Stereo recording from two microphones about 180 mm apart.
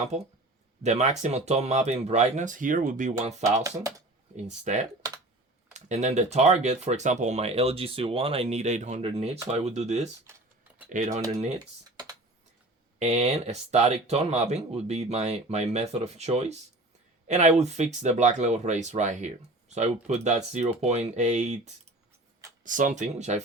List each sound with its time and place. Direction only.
0.8 s speech: 40° right (ahead or behind)
3.9 s speech: 20° right (ahead or behind)
4.6 s speech: 40° right (ahead or behind)
13.0 s speech: 35° right (ahead or behind)